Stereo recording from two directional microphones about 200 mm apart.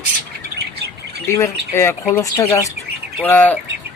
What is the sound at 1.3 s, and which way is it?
Speech, 15° left (ahead or behind).